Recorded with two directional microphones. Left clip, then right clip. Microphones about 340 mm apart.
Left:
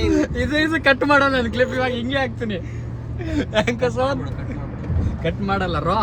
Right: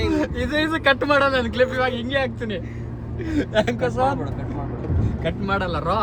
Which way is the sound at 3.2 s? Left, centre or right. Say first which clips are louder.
Left 1 dB; left.